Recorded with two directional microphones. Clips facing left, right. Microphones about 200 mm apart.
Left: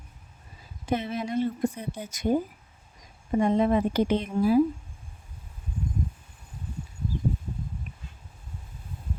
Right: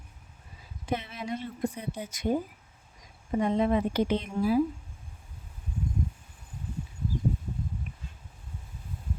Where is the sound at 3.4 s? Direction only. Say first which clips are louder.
Left 3 dB; 45° left (ahead or behind).